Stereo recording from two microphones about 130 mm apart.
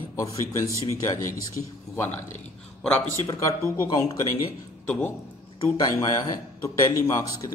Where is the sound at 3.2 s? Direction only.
25° left (ahead or behind).